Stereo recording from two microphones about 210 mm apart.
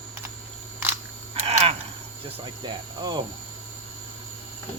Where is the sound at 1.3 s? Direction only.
30° right (ahead or behind).